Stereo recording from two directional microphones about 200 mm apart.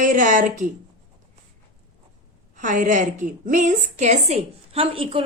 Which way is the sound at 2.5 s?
40° right (ahead or behind).